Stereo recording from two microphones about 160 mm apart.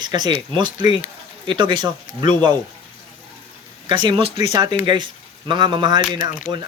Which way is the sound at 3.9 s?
30° right (ahead or behind).